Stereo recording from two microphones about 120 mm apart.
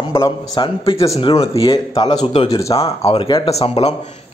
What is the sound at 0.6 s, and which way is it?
Speech, 50° left (ahead or behind).